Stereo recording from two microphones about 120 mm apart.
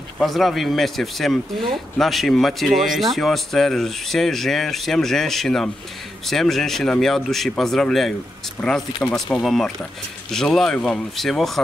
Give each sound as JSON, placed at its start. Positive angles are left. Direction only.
{"t": 0.2, "sound": "speech", "side_deg": 0}